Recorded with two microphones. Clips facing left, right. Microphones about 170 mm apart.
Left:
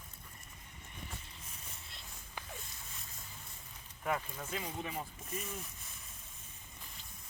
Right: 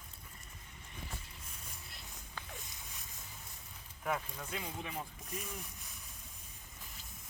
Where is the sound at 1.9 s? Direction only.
25° left (ahead or behind).